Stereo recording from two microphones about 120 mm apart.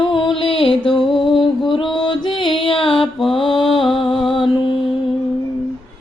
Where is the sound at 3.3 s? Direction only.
45° left (ahead or behind).